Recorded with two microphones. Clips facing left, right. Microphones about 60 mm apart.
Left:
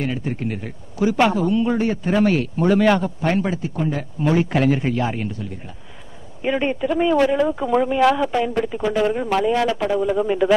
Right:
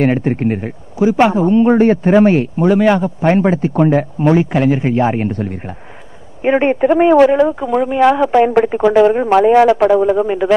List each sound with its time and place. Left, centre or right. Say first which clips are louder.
0.0 s speech: right 10 dB; right
0.9 s a man's voice: right 6 dB; right
3.2 s speech: right 8 dB; right
4.5 s speech: right 5 dB; centre; by 7.2 s right
7.3 s a man's voice: right 6 dB; right
7.6 s speech: right 4 dB; centre
8.3 s speech: right 10 dB; right
9.0 s speech: right 7 dB; right
10.1 s a man's voice: right 4 dB; centre